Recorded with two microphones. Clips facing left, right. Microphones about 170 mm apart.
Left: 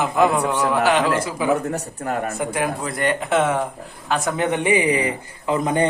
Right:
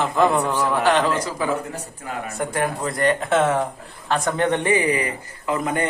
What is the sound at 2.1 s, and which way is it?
Speech, 55° left (ahead or behind).